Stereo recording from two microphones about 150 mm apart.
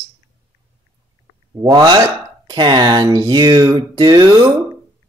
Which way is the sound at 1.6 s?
25° right (ahead or behind).